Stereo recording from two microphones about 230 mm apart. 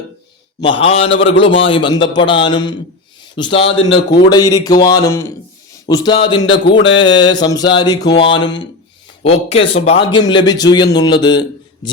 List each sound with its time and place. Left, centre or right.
0.7 s a man's voice: left